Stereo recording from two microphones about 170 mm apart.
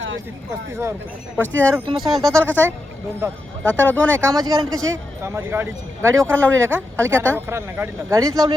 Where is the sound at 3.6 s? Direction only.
10° left (ahead or behind).